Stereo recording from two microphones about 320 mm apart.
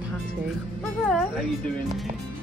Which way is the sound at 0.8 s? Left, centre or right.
Centre.